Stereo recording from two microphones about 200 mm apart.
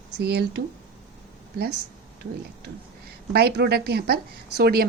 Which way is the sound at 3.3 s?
55° right (ahead or behind).